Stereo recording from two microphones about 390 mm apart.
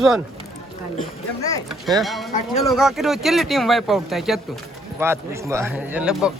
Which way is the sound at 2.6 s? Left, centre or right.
Centre.